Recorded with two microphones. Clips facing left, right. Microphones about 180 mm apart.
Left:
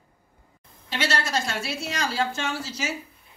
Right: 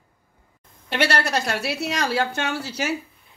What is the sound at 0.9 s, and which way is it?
Speech, 65° right (ahead or behind).